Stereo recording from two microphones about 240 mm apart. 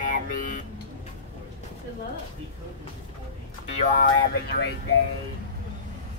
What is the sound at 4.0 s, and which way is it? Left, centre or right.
Speech, left.